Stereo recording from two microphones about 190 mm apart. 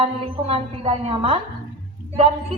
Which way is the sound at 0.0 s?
30° right (ahead or behind).